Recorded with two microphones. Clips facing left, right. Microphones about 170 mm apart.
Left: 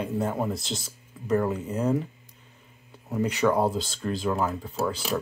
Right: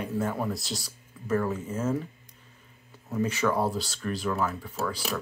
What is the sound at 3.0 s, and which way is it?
Speech, 15° left (ahead or behind).